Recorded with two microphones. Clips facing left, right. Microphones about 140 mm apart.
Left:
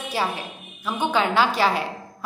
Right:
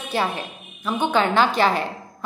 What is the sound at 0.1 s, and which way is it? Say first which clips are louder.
A woman's voice: right 3 dB; 10° left (ahead or behind).